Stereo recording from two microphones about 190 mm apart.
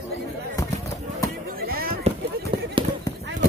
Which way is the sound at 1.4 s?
50° right (ahead or behind).